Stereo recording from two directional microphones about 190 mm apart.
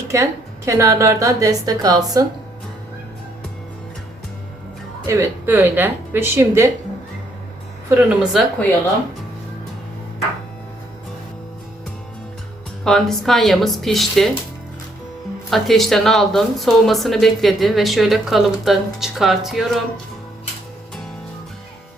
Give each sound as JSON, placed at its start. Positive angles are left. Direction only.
{"t": 0.1, "sound": "a woman's voice", "side_deg": -15}
{"t": 5.0, "sound": "a woman's voice", "side_deg": -15}
{"t": 7.9, "sound": "speech", "side_deg": -5}
{"t": 12.8, "sound": "speech", "side_deg": 0}
{"t": 15.4, "sound": "speech", "side_deg": 0}